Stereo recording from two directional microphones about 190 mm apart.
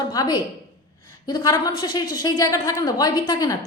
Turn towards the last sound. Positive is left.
turn(degrees=20)  # may be behind; listen again after turning